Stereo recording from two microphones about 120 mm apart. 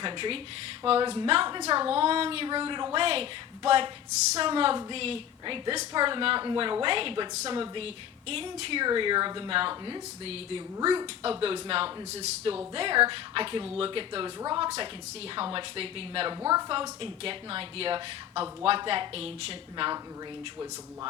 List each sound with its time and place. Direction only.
0.0 s a woman's voice: 45° right (ahead or behind)
1.9 s a woman's voice: 50° right (ahead or behind)
8.8 s speech: 40° right (ahead or behind)
10.2 s a woman's voice: 55° right (ahead or behind)
12.7 s a woman's voice: 45° right (ahead or behind)
16.4 s speech: 30° right (ahead or behind)
17.0 s a woman's voice: 50° right (ahead or behind)